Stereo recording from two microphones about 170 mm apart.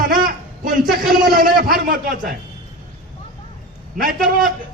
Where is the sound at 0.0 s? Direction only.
55° right (ahead or behind).